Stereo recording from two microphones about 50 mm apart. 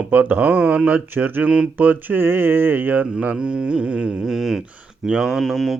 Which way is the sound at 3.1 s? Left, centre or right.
Right.